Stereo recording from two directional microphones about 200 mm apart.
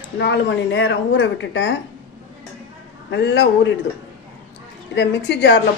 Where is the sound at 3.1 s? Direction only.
60° left (ahead or behind).